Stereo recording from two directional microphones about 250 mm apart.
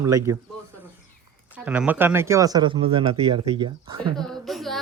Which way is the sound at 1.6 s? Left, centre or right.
Centre.